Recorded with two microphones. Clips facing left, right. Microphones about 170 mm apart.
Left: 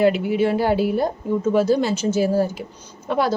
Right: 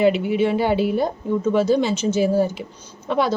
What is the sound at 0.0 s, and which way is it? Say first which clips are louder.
A woman's voice: even; 5° left (ahead or behind).